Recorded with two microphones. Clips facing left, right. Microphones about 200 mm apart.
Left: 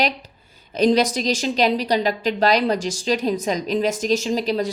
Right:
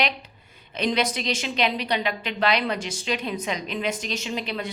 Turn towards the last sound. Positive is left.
turn(degrees=40)  # may be behind; listen again after turning